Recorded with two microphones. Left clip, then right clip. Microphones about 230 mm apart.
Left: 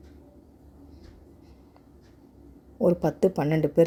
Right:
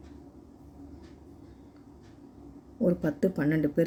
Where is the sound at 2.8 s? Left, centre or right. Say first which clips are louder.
Left 5 dB; left.